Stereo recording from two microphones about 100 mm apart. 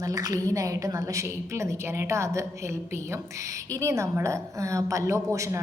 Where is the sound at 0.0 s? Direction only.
35° right (ahead or behind).